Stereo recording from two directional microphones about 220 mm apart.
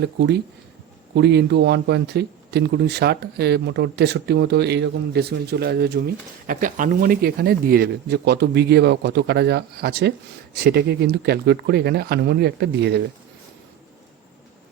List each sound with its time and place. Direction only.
0.0 s speech: 50° right (ahead or behind)